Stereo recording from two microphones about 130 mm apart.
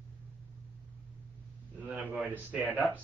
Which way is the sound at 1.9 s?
10° right (ahead or behind).